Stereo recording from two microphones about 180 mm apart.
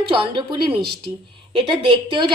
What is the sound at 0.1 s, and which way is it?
A woman's voice, 30° right (ahead or behind).